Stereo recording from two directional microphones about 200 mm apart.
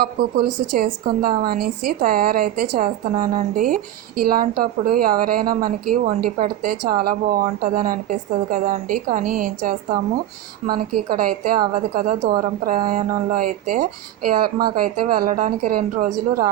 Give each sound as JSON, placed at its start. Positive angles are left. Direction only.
{"t": 0.0, "sound": "speech", "side_deg": -50}